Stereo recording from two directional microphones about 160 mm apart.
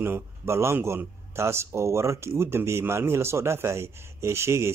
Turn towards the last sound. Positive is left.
turn(degrees=-15)  # may be behind; listen again after turning